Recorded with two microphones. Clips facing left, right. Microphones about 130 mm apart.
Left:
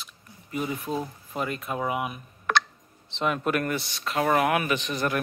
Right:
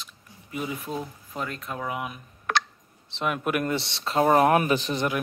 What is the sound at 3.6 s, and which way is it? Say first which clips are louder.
Speech: right 2 dB; 25° right (ahead or behind).